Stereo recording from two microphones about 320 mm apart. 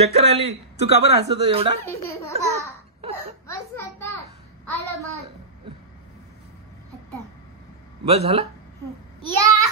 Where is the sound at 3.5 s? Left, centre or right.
Centre.